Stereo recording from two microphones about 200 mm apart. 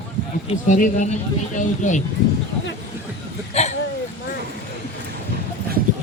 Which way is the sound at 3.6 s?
30° left (ahead or behind).